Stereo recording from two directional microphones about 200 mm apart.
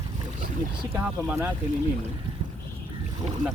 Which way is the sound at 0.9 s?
10° right (ahead or behind).